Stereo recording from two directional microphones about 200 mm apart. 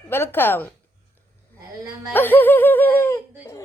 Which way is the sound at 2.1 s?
10° left (ahead or behind).